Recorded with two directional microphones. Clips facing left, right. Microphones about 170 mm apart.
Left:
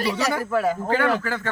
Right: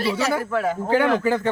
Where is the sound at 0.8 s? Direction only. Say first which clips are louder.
Right 3 dB; 15° right (ahead or behind).